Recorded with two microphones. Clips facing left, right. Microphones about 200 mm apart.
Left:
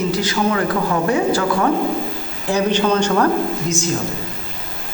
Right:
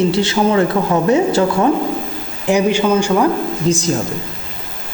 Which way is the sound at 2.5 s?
10° right (ahead or behind).